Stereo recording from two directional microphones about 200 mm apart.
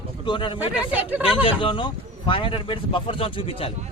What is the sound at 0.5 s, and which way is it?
Speech, 10° right (ahead or behind).